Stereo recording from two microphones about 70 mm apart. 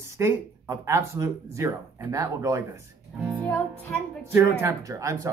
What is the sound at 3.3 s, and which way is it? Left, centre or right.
Music, left.